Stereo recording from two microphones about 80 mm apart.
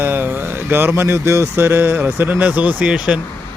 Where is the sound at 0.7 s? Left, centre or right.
Right.